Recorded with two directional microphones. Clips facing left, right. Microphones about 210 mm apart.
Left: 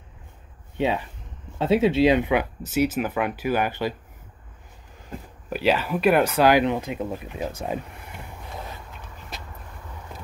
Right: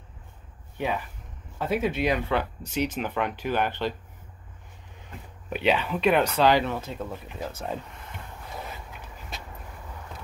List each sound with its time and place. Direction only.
0.7 s speech: 25° left (ahead or behind)
2.3 s speech: 5° left (ahead or behind)
5.5 s speech: centre (ahead or behind)